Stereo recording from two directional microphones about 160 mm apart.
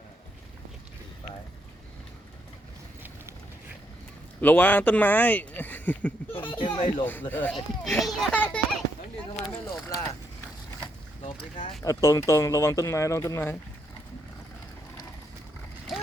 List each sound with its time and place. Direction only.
4.4 s speech: 10° left (ahead or behind)
6.6 s speech: 30° left (ahead or behind)
7.0 s speech: 10° left (ahead or behind)
7.5 s a child's voice: centre (ahead or behind)
11.2 s speech: 50° left (ahead or behind)
11.8 s speech: 20° left (ahead or behind)